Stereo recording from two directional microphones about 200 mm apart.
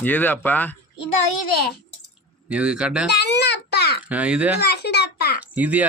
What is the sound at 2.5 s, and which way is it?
Speech, 5° right (ahead or behind).